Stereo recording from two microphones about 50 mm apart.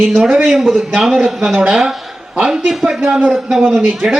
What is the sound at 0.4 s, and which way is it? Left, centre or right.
A man's voice, centre.